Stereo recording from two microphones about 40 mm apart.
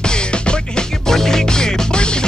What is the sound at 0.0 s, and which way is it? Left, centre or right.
Music, left.